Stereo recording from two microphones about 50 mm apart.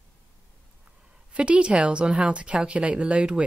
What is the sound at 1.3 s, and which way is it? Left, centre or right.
A woman's voice, right.